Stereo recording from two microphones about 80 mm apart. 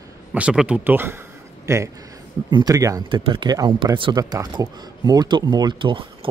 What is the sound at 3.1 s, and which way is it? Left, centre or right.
Speech, right.